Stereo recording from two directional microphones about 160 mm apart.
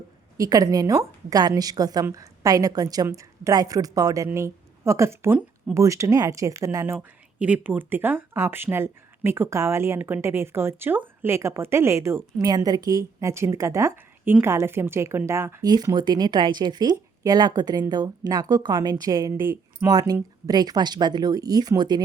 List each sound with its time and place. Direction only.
0.3 s a woman's voice: 20° right (ahead or behind)